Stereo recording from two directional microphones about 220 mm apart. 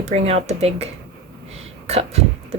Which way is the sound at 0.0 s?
30° right (ahead or behind).